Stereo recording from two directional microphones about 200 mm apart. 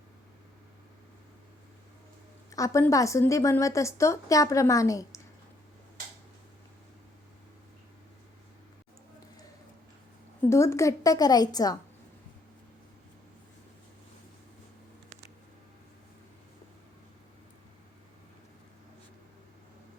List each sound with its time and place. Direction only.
2.5 s a woman's voice: 15° left (ahead or behind)
10.5 s a woman's voice: 15° left (ahead or behind)